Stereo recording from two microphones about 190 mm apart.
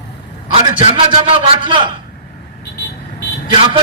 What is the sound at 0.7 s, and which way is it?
A man's voice, 25° right (ahead or behind).